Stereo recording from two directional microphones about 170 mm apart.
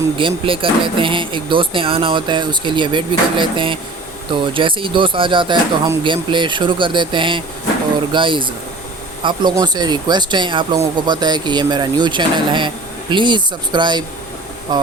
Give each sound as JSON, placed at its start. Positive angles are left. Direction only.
{"t": 0.2, "sound": "speech", "side_deg": -30}